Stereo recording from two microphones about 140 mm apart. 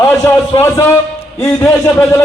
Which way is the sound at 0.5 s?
15° left (ahead or behind).